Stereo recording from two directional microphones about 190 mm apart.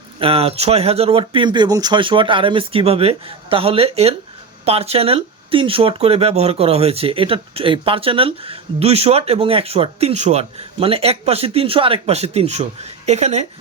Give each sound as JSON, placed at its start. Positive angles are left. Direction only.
{"t": 0.2, "sound": "speech", "side_deg": -30}